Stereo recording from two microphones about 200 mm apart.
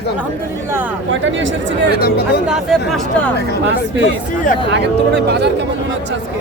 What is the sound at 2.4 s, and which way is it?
Speech, centre (ahead or behind).